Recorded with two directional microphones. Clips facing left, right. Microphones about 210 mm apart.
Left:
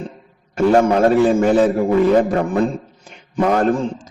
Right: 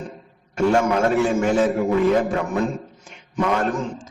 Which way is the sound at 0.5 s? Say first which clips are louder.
Left 5 dB; 35° left (ahead or behind).